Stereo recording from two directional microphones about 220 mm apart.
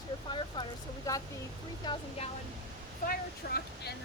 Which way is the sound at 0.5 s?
20° left (ahead or behind).